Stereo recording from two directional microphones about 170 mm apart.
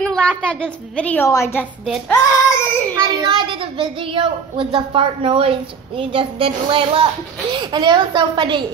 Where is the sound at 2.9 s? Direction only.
25° right (ahead or behind).